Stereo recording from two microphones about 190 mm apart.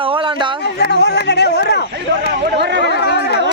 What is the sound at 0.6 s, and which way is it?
Speech, 60° left (ahead or behind).